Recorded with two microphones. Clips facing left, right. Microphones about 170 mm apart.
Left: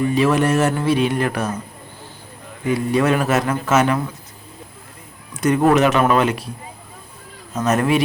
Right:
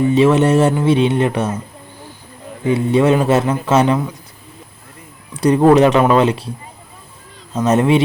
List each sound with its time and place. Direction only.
0.0 s speech: 25° right (ahead or behind)
2.6 s speech: 25° right (ahead or behind)
5.3 s speech: 35° right (ahead or behind)
7.5 s speech: 25° right (ahead or behind)